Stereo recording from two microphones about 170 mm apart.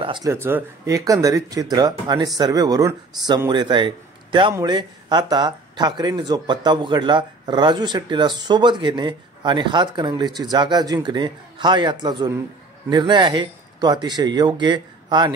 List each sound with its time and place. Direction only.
0.0 s speech: 30° right (ahead or behind)
0.3 s speech: 15° right (ahead or behind)